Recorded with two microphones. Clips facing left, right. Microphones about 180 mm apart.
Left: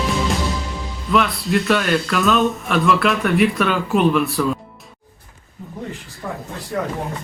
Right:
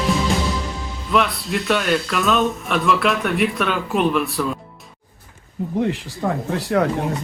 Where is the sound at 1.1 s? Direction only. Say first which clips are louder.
Left 2 dB; centre (ahead or behind).